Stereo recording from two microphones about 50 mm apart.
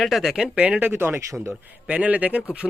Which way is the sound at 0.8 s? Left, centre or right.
Right.